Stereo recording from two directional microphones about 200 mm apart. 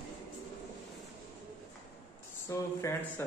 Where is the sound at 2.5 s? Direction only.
15° left (ahead or behind).